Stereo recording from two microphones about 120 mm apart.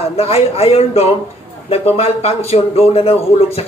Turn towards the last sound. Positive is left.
turn(degrees=55)  # may be behind; listen again after turning